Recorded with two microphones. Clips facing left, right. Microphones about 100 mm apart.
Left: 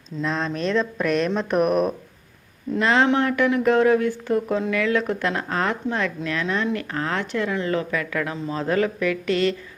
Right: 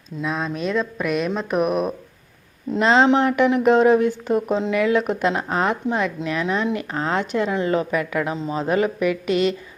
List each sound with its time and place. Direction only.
0.2 s speech: 5° right (ahead or behind)
2.7 s speech: 20° right (ahead or behind)